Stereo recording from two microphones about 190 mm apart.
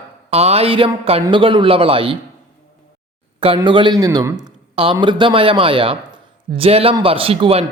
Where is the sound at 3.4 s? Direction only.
25° right (ahead or behind).